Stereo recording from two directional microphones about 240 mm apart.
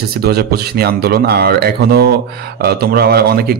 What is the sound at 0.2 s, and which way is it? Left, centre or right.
A man's voice, right.